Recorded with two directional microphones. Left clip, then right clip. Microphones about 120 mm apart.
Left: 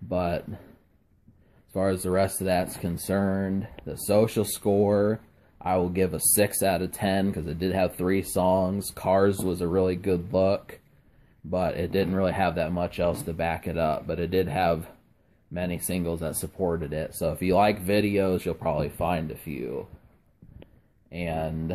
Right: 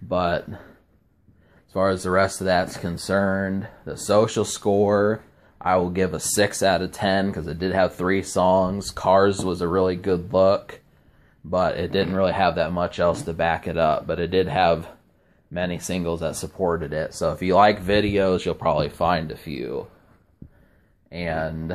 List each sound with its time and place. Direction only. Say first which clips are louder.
0.1 s speech: right 5 dB; 30° left (ahead or behind)
1.7 s speech: right 5 dB; 40° left (ahead or behind)
18.4 s speech: right 6 dB; 20° left (ahead or behind)
21.1 s speech: right 4 dB; 40° left (ahead or behind)